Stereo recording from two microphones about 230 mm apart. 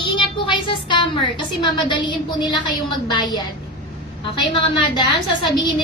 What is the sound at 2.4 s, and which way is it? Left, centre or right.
A woman's voice, centre.